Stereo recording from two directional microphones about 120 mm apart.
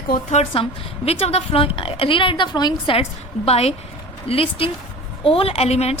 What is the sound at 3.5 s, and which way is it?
A woman's voice, 60° left (ahead or behind).